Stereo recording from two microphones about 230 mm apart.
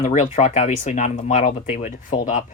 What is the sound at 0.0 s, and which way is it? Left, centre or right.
Speech, left.